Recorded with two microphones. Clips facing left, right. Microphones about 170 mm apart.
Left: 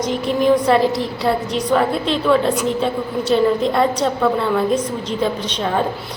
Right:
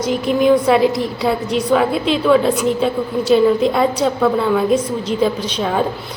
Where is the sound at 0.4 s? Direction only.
10° right (ahead or behind).